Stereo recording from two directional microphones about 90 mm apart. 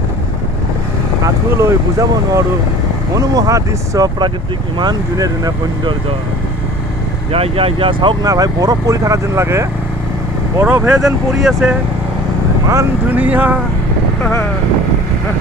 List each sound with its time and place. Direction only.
1.2 s speech: 35° right (ahead or behind)
5.1 s speech: 40° right (ahead or behind)
7.3 s speech: 90° right; by 8.2 s 75° right (ahead or behind)
8.2 s speech: 45° right (ahead or behind)
10.6 s speech: 20° right (ahead or behind)
10.9 s speech: 5° right (ahead or behind)
13.1 s speech: 20° right (ahead or behind)